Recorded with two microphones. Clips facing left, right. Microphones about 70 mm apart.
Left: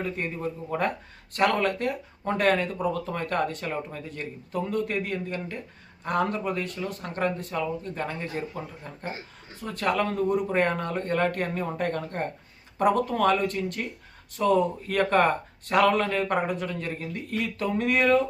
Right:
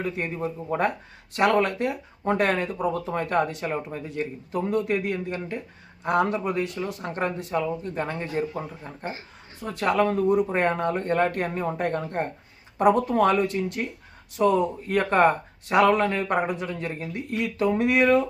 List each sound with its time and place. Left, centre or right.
0.0 s speech: centre